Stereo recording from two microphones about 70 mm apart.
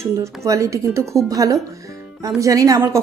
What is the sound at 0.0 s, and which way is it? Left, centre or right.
Speech, right.